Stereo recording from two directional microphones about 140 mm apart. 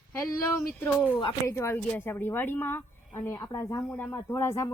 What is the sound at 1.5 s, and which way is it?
A woman's voice, 20° left (ahead or behind).